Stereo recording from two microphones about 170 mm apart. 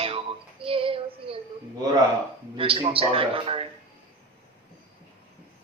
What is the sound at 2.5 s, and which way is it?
A woman's voice, 35° right (ahead or behind).